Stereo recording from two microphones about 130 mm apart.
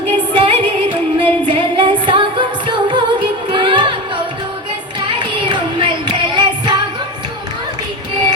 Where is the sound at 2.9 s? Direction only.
35° right (ahead or behind).